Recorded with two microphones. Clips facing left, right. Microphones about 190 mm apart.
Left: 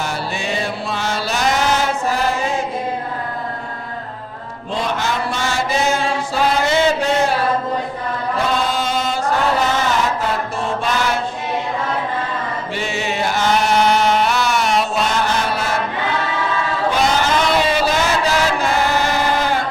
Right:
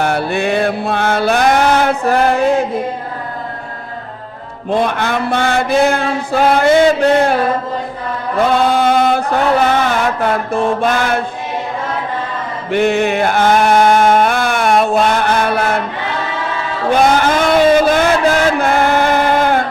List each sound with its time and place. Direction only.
0.0 s chant: 60° right (ahead or behind)
4.7 s chant: 55° right (ahead or behind)
8.7 s chant: 60° right (ahead or behind)
9.6 s mantra: 55° right (ahead or behind)
12.7 s chant: 55° right (ahead or behind)
16.9 s a sound: 55° right (ahead or behind)